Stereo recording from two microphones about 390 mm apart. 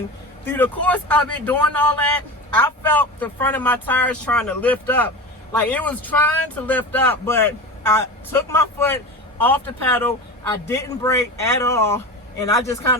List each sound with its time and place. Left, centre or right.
0.4 s a man's voice: centre